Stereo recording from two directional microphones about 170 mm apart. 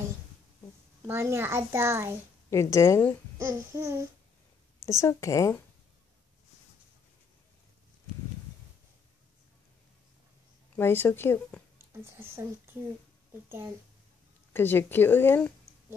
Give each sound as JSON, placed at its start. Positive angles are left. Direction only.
{"t": 1.0, "sound": "a child's voice", "side_deg": -15}
{"t": 2.5, "sound": "speech", "side_deg": 15}
{"t": 3.3, "sound": "a child's voice", "side_deg": -15}
{"t": 4.8, "sound": "speech", "side_deg": 15}
{"t": 10.8, "sound": "speech", "side_deg": 15}
{"t": 11.9, "sound": "a child's voice", "side_deg": -15}
{"t": 14.5, "sound": "speech", "side_deg": 10}